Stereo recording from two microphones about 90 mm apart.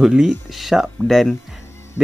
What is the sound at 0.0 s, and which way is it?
Speech, 5° right (ahead or behind).